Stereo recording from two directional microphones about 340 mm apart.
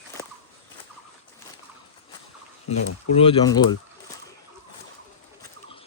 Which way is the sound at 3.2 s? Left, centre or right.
Centre.